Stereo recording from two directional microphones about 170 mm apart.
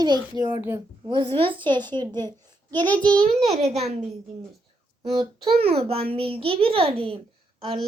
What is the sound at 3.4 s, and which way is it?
Speech, 40° right (ahead or behind).